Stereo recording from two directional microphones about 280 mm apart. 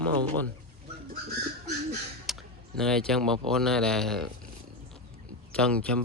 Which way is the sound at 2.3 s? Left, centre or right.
Centre.